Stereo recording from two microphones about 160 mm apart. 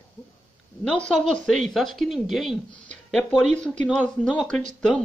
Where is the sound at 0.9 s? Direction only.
5° left (ahead or behind).